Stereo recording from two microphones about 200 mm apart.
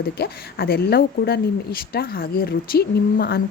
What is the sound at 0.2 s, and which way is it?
Speech, 50° left (ahead or behind).